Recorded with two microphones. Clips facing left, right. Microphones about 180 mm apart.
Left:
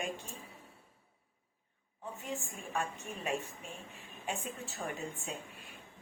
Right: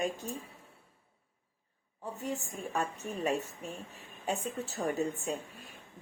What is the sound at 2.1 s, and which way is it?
Speech, 40° right (ahead or behind).